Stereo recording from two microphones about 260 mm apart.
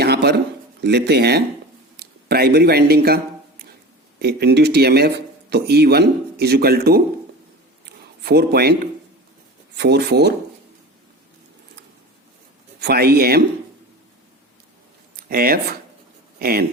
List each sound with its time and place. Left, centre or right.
0.0 s a sound: right
0.9 s speech: right
4.2 s speech: right
7.9 s a sound: right
9.7 s speech: right
12.8 s speech: right
15.1 s speech: right